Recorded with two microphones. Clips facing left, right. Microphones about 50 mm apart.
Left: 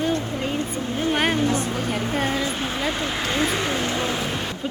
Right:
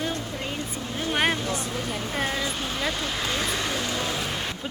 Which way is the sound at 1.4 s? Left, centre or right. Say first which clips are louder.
Left 7 dB; left.